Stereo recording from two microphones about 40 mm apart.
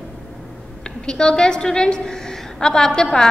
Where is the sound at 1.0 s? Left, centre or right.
Left.